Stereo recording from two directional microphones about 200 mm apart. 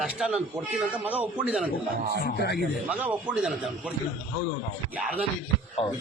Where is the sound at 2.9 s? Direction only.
5° right (ahead or behind).